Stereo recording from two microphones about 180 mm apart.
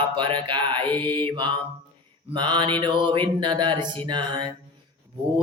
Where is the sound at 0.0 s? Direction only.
25° right (ahead or behind).